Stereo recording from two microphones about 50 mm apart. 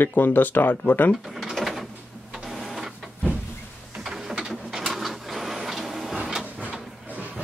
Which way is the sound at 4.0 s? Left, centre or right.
Centre.